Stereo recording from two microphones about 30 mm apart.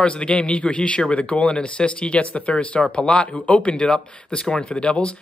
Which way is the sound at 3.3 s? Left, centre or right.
Left.